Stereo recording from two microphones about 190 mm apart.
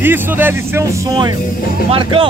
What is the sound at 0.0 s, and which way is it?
Speech, 10° right (ahead or behind).